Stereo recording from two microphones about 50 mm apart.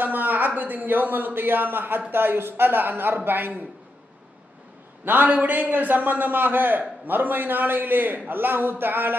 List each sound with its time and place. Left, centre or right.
0.0 s a sound: right
0.6 s a man's voice: right
5.0 s a man's voice: right